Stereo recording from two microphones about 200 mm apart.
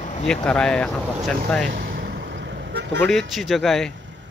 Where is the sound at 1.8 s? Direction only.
45° right (ahead or behind).